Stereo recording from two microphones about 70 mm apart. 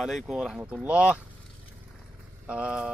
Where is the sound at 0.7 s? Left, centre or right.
Centre.